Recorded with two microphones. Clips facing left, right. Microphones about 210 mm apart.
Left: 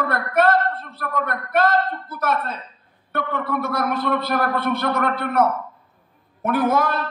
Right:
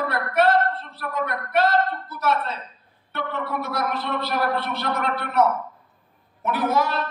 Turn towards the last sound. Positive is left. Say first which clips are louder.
# left 3 dB
turn(degrees=55)  # may be behind; listen again after turning